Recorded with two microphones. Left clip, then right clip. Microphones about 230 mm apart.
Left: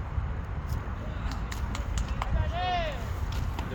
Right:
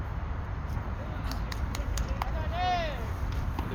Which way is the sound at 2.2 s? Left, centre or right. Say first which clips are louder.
Right 1 dB; right.